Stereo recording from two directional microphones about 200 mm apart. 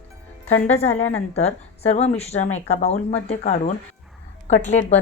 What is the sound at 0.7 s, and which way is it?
Speech, 35° left (ahead or behind).